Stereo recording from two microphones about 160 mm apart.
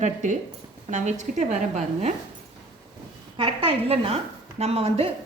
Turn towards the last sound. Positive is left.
turn(degrees=-40)  # may be behind; listen again after turning